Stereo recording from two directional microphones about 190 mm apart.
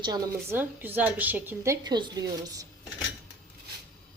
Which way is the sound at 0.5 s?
10° right (ahead or behind).